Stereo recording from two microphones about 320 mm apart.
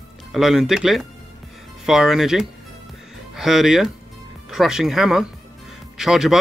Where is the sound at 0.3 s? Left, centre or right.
Centre.